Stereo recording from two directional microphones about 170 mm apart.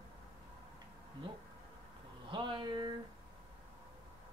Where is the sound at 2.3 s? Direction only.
30° right (ahead or behind).